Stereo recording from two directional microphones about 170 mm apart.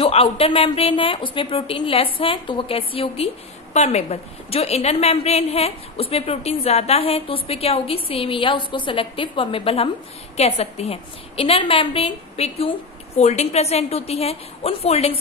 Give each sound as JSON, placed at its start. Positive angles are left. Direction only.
{"t": 0.0, "sound": "a woman's voice", "side_deg": 35}